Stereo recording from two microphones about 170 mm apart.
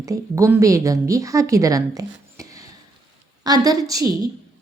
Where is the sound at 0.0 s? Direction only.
20° right (ahead or behind).